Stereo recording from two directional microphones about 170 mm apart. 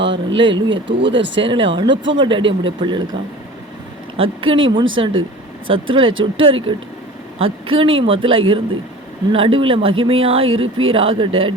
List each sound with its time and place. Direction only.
0.0 s a sound: 90° right
0.9 s speech: 90° right
1.4 s speech: 30° right (ahead or behind)
4.2 s speech: 30° right (ahead or behind)